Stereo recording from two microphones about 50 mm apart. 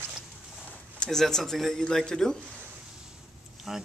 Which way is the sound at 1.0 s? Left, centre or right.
Centre.